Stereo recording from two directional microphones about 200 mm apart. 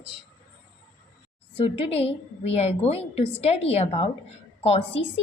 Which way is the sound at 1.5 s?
30° left (ahead or behind).